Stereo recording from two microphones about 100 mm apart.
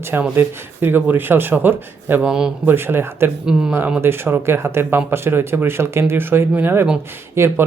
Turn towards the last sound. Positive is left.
turn(degrees=-25)  # may be behind; listen again after turning